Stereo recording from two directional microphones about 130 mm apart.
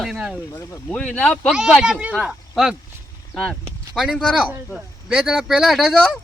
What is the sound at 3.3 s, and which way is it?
Speech, 10° left (ahead or behind).